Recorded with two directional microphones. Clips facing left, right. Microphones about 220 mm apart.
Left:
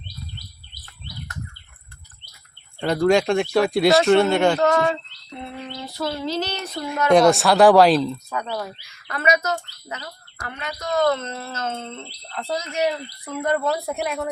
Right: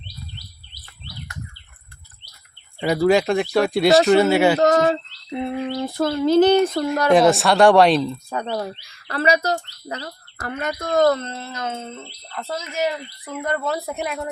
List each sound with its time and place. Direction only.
2.8 s speech: 5° right (ahead or behind)
4.6 s speech: 40° right (ahead or behind)
5.3 s a sound: 55° right (ahead or behind)
7.1 s speech: centre (ahead or behind)
8.3 s speech: 30° right (ahead or behind)
10.4 s a sound: 50° right (ahead or behind); by 11.5 s 30° right (ahead or behind)
11.5 s speech: 10° right (ahead or behind)